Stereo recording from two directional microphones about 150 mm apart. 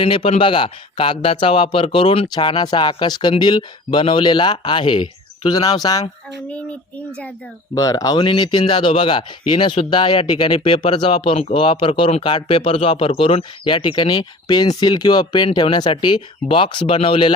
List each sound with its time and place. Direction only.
0.0 s speech: 35° left (ahead or behind)
7.8 s speech: 25° left (ahead or behind)